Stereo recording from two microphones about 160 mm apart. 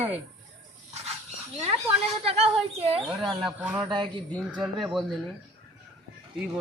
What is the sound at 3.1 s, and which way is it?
Speech, 5° right (ahead or behind).